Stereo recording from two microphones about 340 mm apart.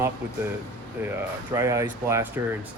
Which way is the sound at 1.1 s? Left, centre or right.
Centre.